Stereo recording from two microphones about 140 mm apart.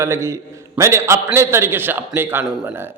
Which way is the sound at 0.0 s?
20° right (ahead or behind).